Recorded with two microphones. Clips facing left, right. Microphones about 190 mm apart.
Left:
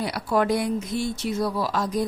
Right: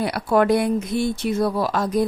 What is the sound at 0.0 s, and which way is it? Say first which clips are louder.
A woman's voice: right 4 dB; 55° right (ahead or behind).